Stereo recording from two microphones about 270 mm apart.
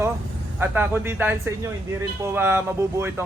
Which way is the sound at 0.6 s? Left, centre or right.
Centre.